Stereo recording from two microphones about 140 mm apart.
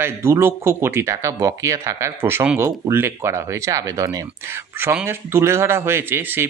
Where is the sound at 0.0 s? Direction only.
15° right (ahead or behind).